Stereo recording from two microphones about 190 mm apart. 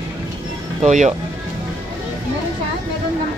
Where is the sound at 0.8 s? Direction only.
40° right (ahead or behind).